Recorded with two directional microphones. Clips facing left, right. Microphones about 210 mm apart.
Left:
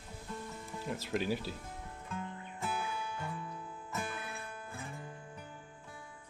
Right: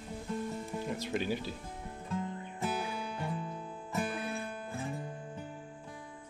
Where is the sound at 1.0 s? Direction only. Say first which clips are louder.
Left 2 dB; centre (ahead or behind).